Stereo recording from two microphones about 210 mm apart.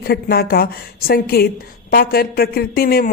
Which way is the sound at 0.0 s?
45° left (ahead or behind).